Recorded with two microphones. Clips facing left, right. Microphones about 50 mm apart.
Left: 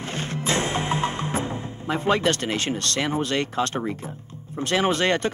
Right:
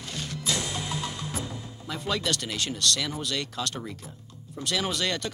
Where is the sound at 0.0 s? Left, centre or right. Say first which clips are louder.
Left 6 dB; left.